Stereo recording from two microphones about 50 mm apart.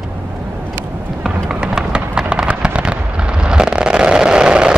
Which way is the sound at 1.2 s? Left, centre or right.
Centre.